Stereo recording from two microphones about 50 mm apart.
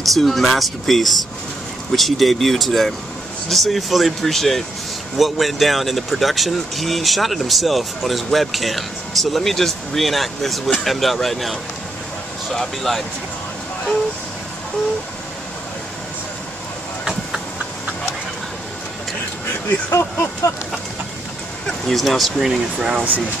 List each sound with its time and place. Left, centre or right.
0.0 s speech: centre
17.0 s train: centre
19.9 s speech: left
21.6 s speech: centre
22.5 s speech: centre